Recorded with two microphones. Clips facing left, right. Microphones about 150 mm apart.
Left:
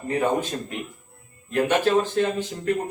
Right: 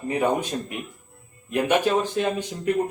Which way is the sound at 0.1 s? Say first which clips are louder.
Even; 15° right (ahead or behind).